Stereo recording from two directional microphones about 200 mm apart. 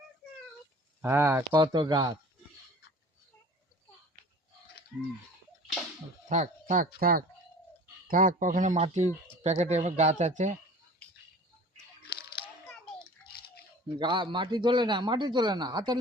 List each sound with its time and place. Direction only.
1.0 s speech: 10° right (ahead or behind)
1.5 s speech: 20° right (ahead or behind)
6.2 s speech: 35° right (ahead or behind)
13.2 s a sound: 50° left (ahead or behind)
14.0 s speech: 25° right (ahead or behind)